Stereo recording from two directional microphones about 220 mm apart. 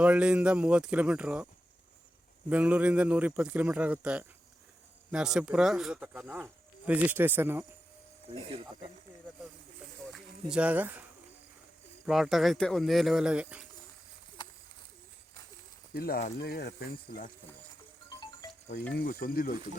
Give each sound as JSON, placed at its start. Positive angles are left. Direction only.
{"t": 0.0, "sound": "speech", "side_deg": -5}
{"t": 2.5, "sound": "a man's voice", "side_deg": -5}
{"t": 8.4, "sound": "speech", "side_deg": -25}
{"t": 10.1, "sound": "a sound", "side_deg": -5}
{"t": 12.0, "sound": "speech", "side_deg": 0}
{"t": 16.0, "sound": "speech", "side_deg": 45}
{"t": 18.9, "sound": "speech", "side_deg": 40}